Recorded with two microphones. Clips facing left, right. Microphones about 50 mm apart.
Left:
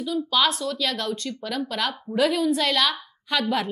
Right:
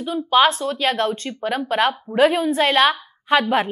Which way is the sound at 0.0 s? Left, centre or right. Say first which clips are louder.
Right 6 dB; right.